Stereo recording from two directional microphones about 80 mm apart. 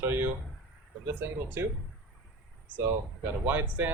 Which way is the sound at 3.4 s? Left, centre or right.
Right.